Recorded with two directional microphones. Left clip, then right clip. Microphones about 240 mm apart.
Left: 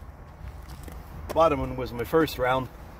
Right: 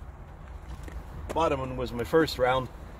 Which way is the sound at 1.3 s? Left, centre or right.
Left.